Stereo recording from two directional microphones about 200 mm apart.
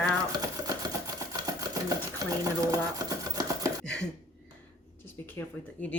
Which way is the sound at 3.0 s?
20° right (ahead or behind).